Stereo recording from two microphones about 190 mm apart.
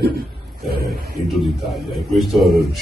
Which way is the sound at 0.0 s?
55° right (ahead or behind).